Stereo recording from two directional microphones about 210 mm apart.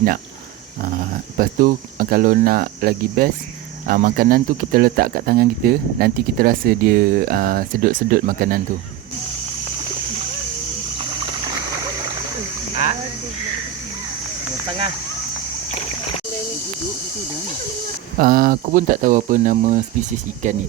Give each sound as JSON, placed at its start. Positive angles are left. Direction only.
{"t": 0.8, "sound": "speech", "side_deg": -45}
{"t": 18.2, "sound": "speech", "side_deg": -45}